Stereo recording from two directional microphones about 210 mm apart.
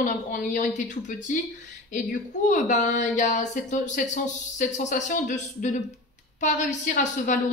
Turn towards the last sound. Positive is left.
turn(degrees=35)  # may be behind; listen again after turning